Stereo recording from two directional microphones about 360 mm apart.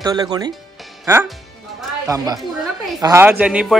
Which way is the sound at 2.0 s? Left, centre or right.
Centre.